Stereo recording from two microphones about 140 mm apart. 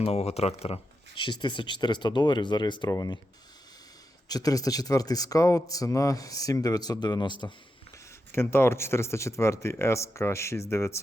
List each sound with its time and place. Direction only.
0.0 s speech: 45° left (ahead or behind); by 3.2 s 30° left (ahead or behind)
4.3 s speech: 25° left (ahead or behind)
8.3 s speech: 15° left (ahead or behind)